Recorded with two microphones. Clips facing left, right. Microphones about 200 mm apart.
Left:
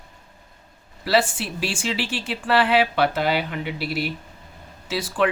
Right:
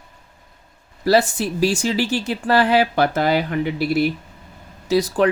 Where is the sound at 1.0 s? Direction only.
40° right (ahead or behind).